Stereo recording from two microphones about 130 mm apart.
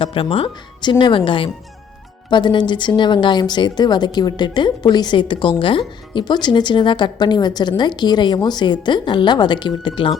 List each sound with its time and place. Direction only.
0.0 s a woman's voice: 45° left (ahead or behind)